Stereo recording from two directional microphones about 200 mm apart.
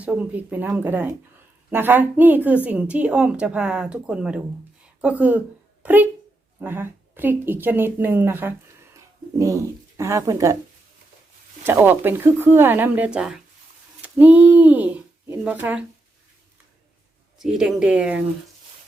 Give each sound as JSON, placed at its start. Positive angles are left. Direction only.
{"t": 0.0, "sound": "a woman's voice", "side_deg": -5}
{"t": 11.6, "sound": "speech", "side_deg": -10}
{"t": 17.3, "sound": "speech", "side_deg": 0}